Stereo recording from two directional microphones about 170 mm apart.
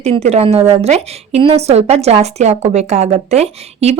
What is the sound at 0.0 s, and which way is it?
A woman's voice, 40° right (ahead or behind).